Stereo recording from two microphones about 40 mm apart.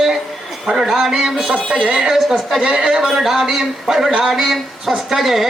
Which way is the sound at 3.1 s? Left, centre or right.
Centre.